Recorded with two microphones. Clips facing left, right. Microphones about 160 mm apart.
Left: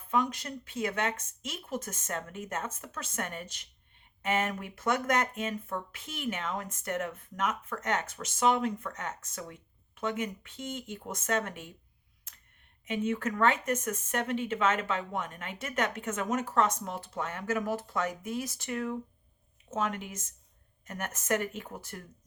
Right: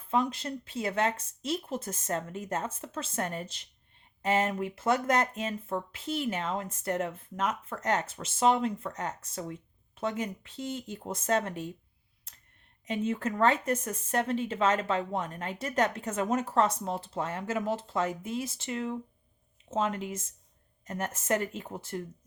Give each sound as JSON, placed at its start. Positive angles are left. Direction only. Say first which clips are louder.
{"t": 0.1, "sound": "speech", "louder": "right 1 dB", "side_deg": -30}
{"t": 12.8, "sound": "speech", "louder": "even", "side_deg": -35}